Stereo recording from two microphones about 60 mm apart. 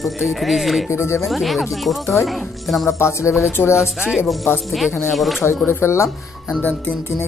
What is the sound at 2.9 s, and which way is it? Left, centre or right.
Speech, left.